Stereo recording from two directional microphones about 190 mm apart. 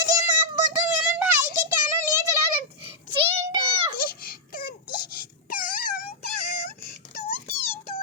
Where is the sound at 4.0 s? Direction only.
50° left (ahead or behind).